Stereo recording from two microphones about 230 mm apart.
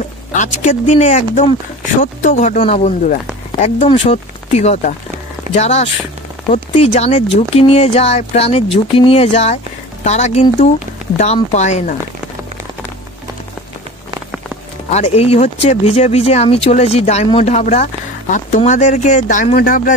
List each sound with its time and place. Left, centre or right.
0.3 s speech: left
14.9 s speech: left